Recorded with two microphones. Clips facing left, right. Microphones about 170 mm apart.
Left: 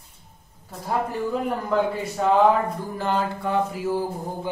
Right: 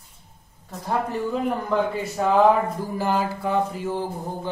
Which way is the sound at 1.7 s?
Centre (ahead or behind).